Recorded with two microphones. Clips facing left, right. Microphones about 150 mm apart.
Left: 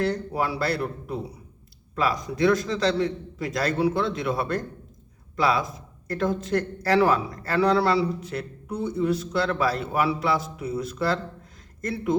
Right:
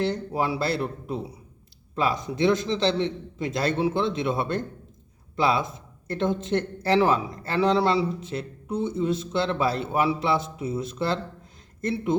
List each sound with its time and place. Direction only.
0.0 s speech: 25° right (ahead or behind)